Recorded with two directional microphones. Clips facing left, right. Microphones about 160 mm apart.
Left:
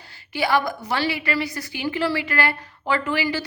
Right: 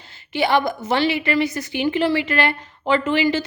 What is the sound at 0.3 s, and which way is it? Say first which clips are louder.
A woman's voice: right 3 dB; 25° right (ahead or behind).